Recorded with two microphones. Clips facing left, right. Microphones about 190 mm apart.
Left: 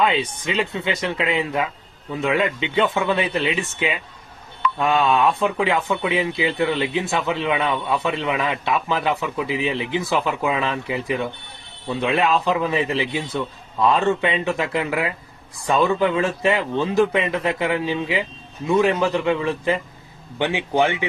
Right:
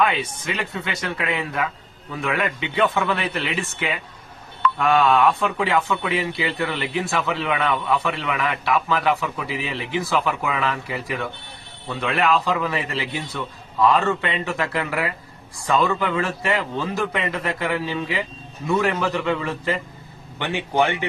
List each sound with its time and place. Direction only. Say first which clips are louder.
0.0 s speech: left 1 dB; 20° left (ahead or behind)